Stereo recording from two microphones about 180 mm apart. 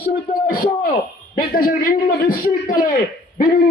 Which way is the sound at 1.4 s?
55° left (ahead or behind).